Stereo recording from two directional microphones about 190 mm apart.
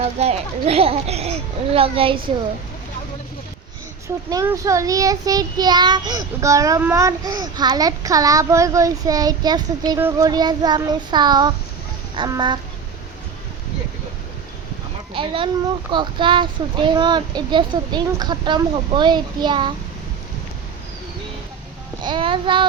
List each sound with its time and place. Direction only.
0.0 s speech: 35° right (ahead or behind)
4.3 s child singing: 15° right (ahead or behind)
15.1 s speech: 25° right (ahead or behind)
15.9 s child singing: 25° right (ahead or behind)
22.0 s child singing: 25° right (ahead or behind)